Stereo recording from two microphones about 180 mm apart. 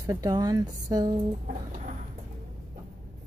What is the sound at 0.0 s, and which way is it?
Speech, 20° right (ahead or behind).